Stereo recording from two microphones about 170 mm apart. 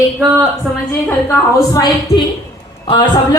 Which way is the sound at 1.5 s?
20° left (ahead or behind).